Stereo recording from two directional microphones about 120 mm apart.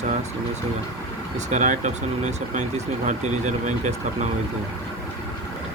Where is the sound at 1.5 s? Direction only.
90° right.